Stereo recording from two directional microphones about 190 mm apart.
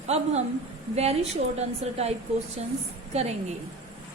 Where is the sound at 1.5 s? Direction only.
35° right (ahead or behind).